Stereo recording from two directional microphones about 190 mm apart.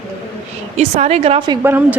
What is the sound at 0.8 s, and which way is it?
Speech, 35° right (ahead or behind).